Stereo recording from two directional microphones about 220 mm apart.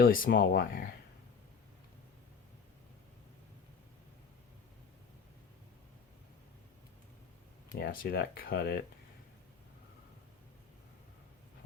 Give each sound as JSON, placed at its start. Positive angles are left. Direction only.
{"t": 0.0, "sound": "speech", "side_deg": 40}
{"t": 7.8, "sound": "speech", "side_deg": 45}